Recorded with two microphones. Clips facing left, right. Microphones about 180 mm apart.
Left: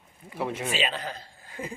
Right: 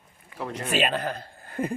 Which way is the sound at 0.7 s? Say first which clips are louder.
Right 5 dB; 55° right (ahead or behind).